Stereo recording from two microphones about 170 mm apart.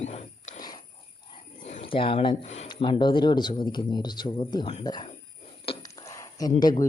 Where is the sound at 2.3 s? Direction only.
40° left (ahead or behind).